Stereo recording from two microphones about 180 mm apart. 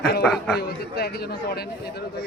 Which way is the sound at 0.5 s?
60° left (ahead or behind).